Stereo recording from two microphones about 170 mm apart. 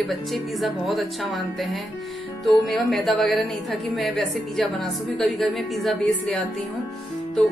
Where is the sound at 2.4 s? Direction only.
Centre (ahead or behind).